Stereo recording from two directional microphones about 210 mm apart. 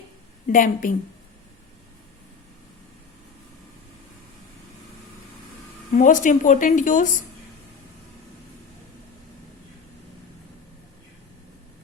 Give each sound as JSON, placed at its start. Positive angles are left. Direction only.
{"t": 0.4, "sound": "speech", "side_deg": 40}
{"t": 5.9, "sound": "speech", "side_deg": 40}